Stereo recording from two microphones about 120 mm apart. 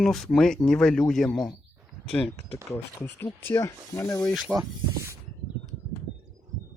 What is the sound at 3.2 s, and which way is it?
Speech, 20° left (ahead or behind).